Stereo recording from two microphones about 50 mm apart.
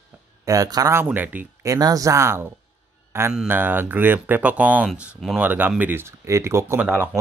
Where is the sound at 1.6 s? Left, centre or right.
Right.